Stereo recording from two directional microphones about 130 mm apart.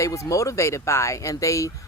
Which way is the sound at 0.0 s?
25° left (ahead or behind).